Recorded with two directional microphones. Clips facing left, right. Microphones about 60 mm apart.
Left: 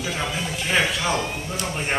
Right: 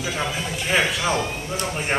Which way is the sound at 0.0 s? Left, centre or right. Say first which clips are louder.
Right 1 dB; centre.